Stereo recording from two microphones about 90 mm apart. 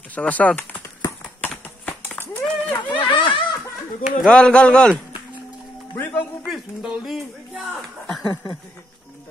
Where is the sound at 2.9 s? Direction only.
70° left (ahead or behind).